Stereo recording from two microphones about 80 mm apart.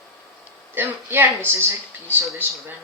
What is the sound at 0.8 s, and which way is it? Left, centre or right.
A woman's voice, right.